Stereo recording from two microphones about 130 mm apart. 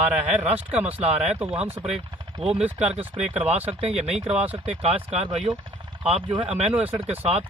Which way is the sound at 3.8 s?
55° right (ahead or behind).